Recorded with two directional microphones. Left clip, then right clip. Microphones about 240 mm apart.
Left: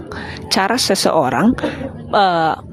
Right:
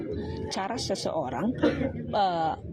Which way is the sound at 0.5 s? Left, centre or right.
Left.